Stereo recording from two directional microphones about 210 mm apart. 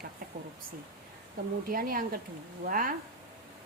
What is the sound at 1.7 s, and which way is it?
A woman's voice, 45° right (ahead or behind).